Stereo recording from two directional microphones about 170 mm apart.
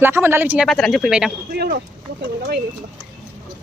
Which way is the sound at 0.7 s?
Centre (ahead or behind).